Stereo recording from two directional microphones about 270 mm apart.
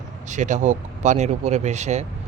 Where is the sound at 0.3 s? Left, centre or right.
Right.